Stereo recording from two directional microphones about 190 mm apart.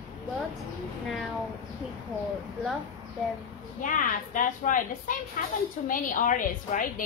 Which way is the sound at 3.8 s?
45° left (ahead or behind).